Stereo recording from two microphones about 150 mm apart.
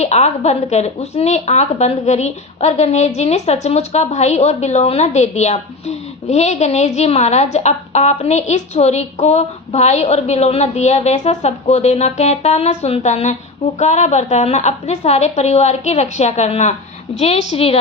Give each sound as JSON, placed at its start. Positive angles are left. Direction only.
{"t": 0.0, "sound": "a woman's voice", "side_deg": 45}